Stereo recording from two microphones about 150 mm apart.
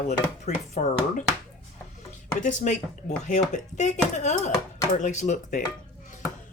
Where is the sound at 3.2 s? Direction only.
55° left (ahead or behind).